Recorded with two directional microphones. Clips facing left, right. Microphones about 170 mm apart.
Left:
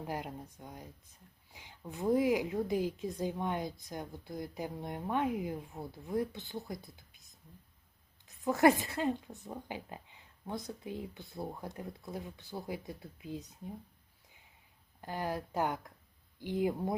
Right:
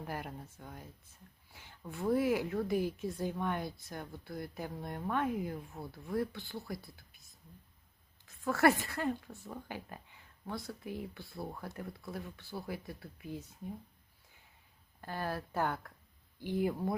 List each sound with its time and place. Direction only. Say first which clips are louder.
0.0 s a woman's voice: left 2 dB; 15° left (ahead or behind)
6.8 s a sound: even; 20° left (ahead or behind)
8.3 s speech: left 2 dB; 20° left (ahead or behind)
15.0 s a woman's voice: left 2 dB; 15° left (ahead or behind)